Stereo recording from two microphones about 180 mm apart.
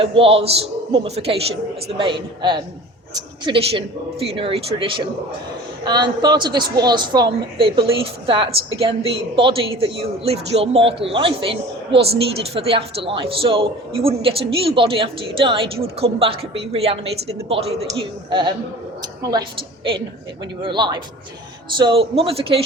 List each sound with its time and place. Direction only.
0.0 s a woman's voice: 30° right (ahead or behind)